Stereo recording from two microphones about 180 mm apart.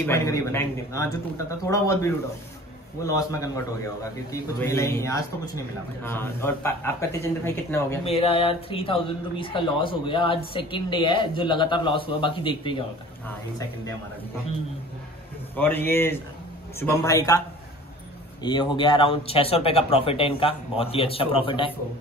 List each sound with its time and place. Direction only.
0.0 s a man's voice: 15° left (ahead or behind)
8.0 s speech: 30° left (ahead or behind)
15.5 s a man's voice: 10° left (ahead or behind)
18.4 s speech: 25° left (ahead or behind)